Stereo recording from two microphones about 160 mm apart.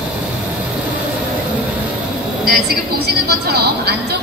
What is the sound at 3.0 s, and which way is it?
A woman's voice, 85° right.